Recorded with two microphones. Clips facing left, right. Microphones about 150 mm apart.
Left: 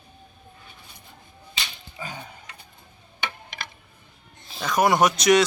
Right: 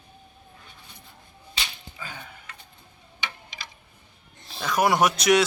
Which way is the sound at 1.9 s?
20° left (ahead or behind).